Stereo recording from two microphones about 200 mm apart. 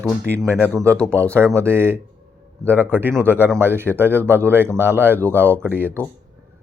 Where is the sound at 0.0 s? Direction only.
5° left (ahead or behind).